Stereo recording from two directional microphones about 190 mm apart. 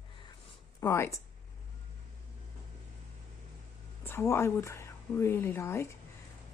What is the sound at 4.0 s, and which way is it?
A woman's voice, 10° left (ahead or behind).